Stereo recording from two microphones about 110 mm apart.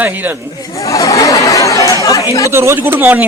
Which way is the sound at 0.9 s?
30° left (ahead or behind).